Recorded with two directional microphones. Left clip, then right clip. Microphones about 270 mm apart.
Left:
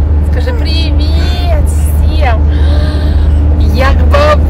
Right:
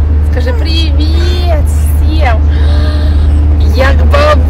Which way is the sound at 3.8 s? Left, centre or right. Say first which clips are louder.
Right 1 dB; centre.